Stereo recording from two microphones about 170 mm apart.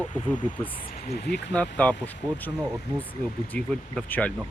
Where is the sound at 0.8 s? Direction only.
60° left (ahead or behind); by 1.5 s 75° left (ahead or behind).